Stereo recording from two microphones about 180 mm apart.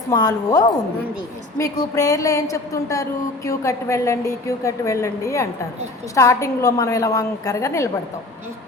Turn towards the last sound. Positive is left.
turn(degrees=15)  # may be behind; listen again after turning